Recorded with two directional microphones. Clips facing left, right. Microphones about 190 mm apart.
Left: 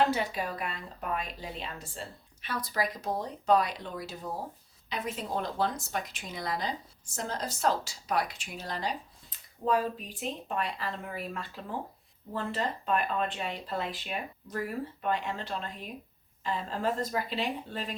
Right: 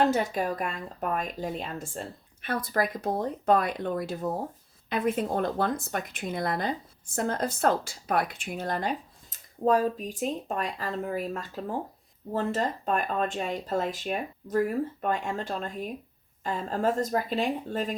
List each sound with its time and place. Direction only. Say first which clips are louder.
0.1 s speech: right 5 dB; 45° right (ahead or behind)